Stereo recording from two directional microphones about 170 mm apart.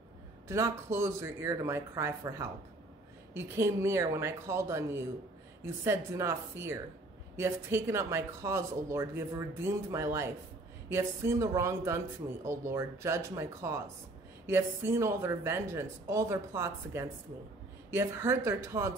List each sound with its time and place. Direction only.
0.5 s speech: 15° right (ahead or behind)